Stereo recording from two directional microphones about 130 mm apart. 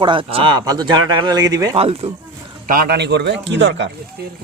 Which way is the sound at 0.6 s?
30° right (ahead or behind).